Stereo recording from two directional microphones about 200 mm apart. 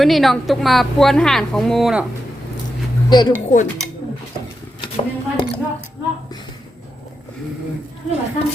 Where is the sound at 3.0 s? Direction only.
20° left (ahead or behind).